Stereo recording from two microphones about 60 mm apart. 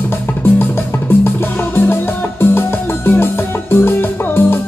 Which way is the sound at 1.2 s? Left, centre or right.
Left.